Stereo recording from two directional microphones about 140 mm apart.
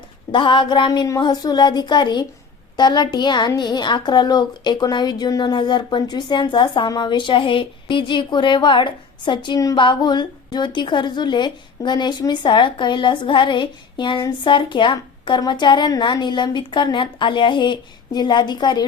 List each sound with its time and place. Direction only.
0.3 s a woman's voice: 35° left (ahead or behind)